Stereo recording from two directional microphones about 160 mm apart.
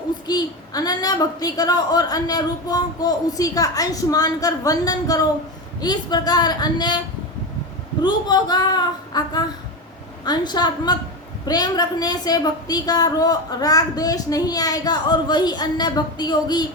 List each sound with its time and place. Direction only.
0.3 s a woman's voice: 25° left (ahead or behind)
8.0 s a woman's voice: 25° left (ahead or behind)